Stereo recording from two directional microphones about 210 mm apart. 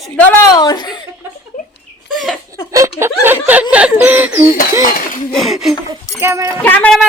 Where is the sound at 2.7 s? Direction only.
15° right (ahead or behind).